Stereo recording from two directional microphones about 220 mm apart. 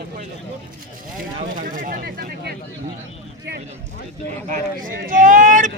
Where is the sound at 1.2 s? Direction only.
40° right (ahead or behind).